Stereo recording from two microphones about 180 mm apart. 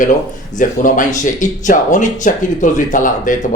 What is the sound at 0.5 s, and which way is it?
Speech, 45° left (ahead or behind).